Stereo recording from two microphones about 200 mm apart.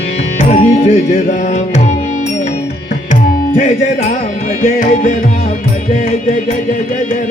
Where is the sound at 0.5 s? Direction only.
35° left (ahead or behind).